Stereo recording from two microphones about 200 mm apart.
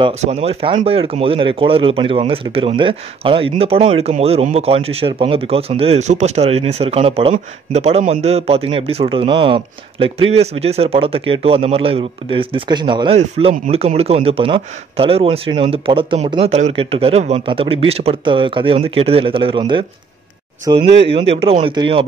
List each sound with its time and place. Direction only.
0.0 s speech: 30° right (ahead or behind)